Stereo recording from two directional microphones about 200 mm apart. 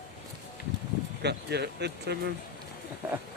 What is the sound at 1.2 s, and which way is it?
Speech, 55° right (ahead or behind).